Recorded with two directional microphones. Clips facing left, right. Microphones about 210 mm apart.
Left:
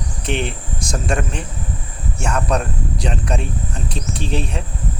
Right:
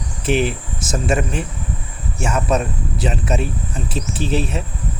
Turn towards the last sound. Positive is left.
turn(degrees=-5)  # may be behind; listen again after turning